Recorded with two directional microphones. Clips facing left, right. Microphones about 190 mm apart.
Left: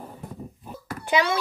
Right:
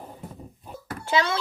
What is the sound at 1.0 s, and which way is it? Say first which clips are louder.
Speech: left 1 dB; 15° left (ahead or behind).